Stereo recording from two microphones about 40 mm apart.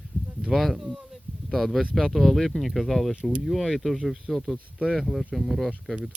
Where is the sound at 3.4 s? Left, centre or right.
Centre.